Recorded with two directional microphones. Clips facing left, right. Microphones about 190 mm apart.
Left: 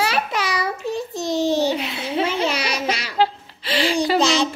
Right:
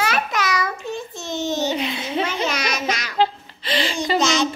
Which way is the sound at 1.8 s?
5° left (ahead or behind).